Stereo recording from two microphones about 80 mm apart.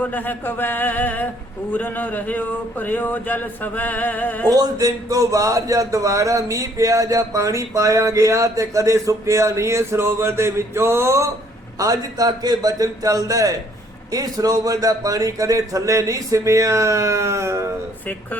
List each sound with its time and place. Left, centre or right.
0.0 s speech: left
4.4 s speech: right
11.8 s a man's voice: right